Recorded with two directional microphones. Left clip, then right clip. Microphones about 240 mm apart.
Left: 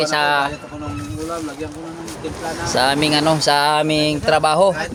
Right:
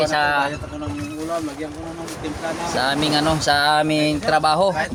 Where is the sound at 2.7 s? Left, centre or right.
Left.